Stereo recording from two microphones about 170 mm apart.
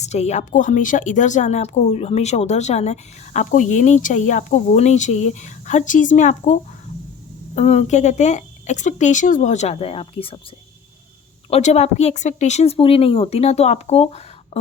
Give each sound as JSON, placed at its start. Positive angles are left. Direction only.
{"t": 0.0, "sound": "a woman's voice", "side_deg": 40}
{"t": 11.4, "sound": "speech", "side_deg": 40}